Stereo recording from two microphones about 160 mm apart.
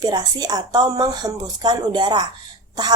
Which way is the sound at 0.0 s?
25° right (ahead or behind).